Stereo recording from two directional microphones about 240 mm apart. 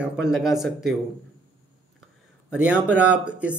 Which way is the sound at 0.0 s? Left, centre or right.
Centre.